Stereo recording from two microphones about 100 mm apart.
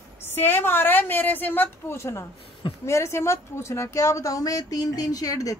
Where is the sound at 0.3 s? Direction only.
20° left (ahead or behind).